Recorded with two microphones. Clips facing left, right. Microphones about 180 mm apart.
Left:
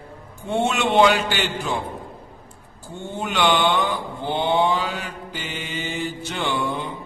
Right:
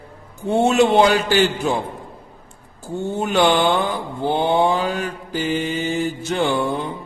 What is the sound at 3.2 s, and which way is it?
Mantra, 45° right (ahead or behind).